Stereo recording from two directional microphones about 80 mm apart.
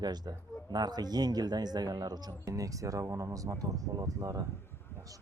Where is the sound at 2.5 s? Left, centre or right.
Right.